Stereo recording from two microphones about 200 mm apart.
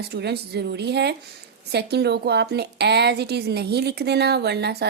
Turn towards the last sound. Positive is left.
turn(degrees=-55)  # may be behind; listen again after turning